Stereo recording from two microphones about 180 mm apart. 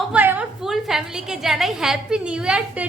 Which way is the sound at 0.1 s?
10° right (ahead or behind).